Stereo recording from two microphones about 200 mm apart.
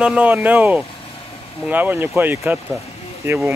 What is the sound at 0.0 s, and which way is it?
Speech, 5° right (ahead or behind).